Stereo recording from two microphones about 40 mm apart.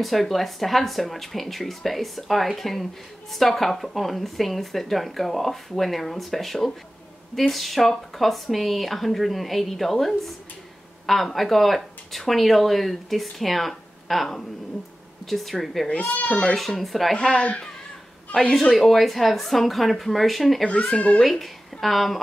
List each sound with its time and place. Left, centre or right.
0.0 s speech: centre
16.2 s speech: left
16.5 s speech: centre
17.2 s speech: left
18.5 s speech: centre
20.6 s speech: left
21.2 s speech: centre